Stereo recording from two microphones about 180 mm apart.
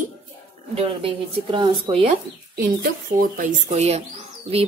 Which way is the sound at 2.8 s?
50° right (ahead or behind).